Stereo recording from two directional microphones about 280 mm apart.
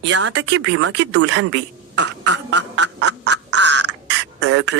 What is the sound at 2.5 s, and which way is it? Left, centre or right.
Quack, right.